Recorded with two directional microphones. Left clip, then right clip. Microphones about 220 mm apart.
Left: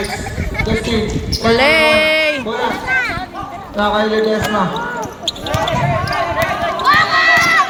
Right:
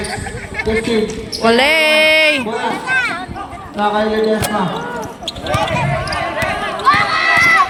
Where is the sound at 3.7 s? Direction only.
35° left (ahead or behind).